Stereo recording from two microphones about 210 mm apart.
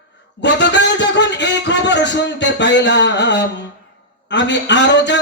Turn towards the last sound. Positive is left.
turn(degrees=55)  # may be behind; listen again after turning